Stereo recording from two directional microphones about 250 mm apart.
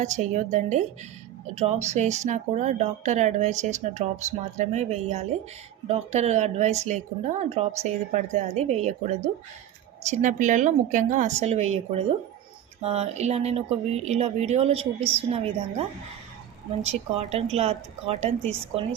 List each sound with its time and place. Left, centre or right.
0.0 s speech: right
16.8 s speech: right